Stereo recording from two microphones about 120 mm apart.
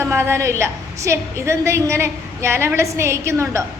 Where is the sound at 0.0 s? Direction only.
20° right (ahead or behind).